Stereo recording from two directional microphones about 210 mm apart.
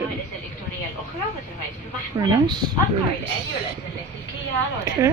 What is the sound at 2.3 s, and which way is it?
Speech, 20° right (ahead or behind).